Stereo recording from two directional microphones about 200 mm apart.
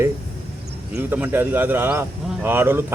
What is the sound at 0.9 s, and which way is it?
Speech, 10° right (ahead or behind).